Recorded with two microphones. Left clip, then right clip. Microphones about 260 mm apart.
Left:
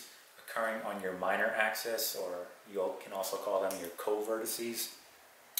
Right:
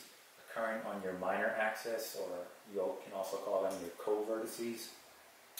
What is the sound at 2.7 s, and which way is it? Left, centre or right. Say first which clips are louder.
Speech: left 3 dB; centre.